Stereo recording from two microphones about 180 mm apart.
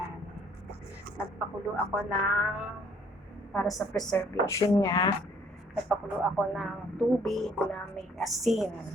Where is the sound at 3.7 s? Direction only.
Centre (ahead or behind).